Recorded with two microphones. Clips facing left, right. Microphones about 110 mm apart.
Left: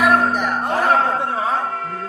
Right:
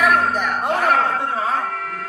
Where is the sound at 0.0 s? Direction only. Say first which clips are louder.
Left 1 dB; 30° left (ahead or behind).